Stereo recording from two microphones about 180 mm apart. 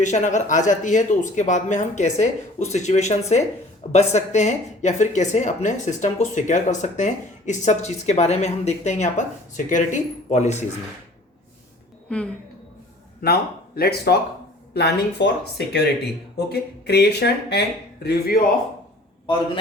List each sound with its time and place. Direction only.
0.0 s a woman's voice: 45° left (ahead or behind)
12.0 s a woman's voice: 5° left (ahead or behind)
13.2 s speech: 60° left (ahead or behind)